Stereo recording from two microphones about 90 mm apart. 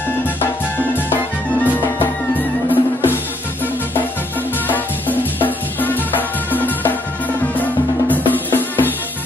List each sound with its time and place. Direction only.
1.1 s music: 20° left (ahead or behind)
2.7 s drum: 25° left (ahead or behind)
4.6 s music: 20° left (ahead or behind)